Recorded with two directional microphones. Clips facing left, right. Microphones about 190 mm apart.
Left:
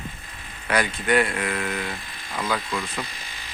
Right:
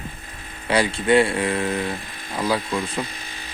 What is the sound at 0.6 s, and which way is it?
Speech, 30° right (ahead or behind).